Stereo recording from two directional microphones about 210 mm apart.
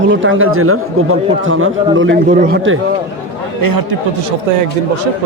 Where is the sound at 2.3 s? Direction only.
40° right (ahead or behind).